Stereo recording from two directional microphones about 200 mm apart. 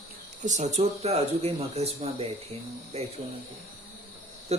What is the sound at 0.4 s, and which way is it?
Speech, 35° right (ahead or behind).